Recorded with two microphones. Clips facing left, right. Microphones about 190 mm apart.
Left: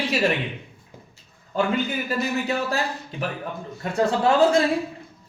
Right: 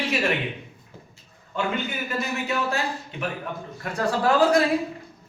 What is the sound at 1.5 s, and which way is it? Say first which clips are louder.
Speech: left 4 dB; 35° left (ahead or behind).